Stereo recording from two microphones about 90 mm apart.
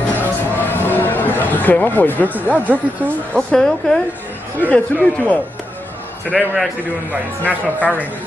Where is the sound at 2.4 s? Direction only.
20° right (ahead or behind).